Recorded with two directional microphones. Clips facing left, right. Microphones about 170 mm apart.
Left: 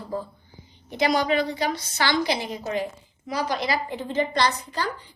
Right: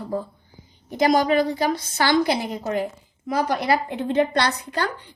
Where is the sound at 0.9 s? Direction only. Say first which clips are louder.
Right 4 dB; 45° right (ahead or behind).